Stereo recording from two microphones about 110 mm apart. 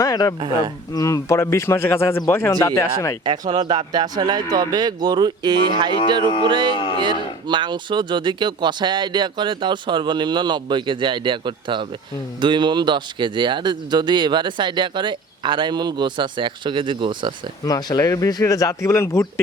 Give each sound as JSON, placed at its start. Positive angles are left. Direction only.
{"t": 0.0, "sound": "speech", "side_deg": 30}
{"t": 0.3, "sound": "speech", "side_deg": -45}
{"t": 0.9, "sound": "a man's voice", "side_deg": 30}
{"t": 3.2, "sound": "speech", "side_deg": -40}
{"t": 6.7, "sound": "speech", "side_deg": 50}
{"t": 7.0, "sound": "speech", "side_deg": -45}
{"t": 17.7, "sound": "speech", "side_deg": 35}